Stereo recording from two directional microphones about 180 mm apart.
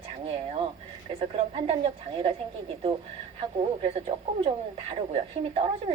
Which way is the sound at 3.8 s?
30° right (ahead or behind).